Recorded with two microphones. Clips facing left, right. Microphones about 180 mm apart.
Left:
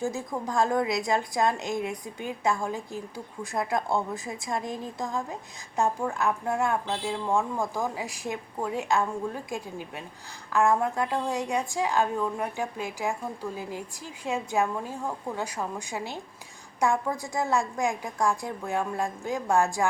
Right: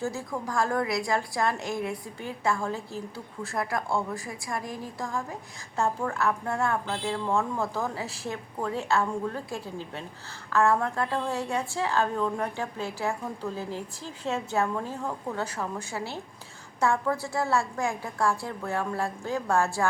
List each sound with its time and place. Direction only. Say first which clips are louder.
0.0 s a woman's voice: left 1 dB; 15° left (ahead or behind)